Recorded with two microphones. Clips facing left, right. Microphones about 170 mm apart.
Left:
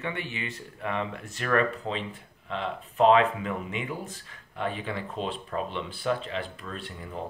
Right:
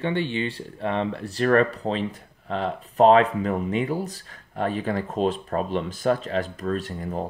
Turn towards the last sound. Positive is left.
turn(degrees=-40)  # may be behind; listen again after turning